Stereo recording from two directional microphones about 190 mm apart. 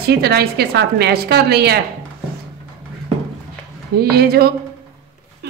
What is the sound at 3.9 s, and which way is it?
Speech, 55° right (ahead or behind).